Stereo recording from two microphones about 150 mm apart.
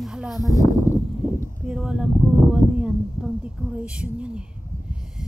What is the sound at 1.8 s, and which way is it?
Speech, 5° right (ahead or behind).